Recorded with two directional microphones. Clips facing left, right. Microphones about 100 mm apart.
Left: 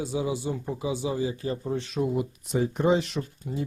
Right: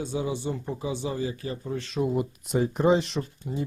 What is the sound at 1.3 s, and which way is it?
Speech, 35° left (ahead or behind).